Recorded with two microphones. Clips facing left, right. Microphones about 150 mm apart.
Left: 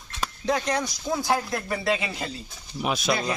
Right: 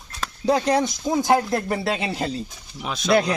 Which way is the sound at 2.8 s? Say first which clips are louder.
Left 3 dB; 10° left (ahead or behind).